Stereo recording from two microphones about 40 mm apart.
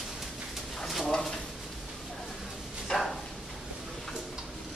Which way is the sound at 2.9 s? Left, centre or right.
Centre.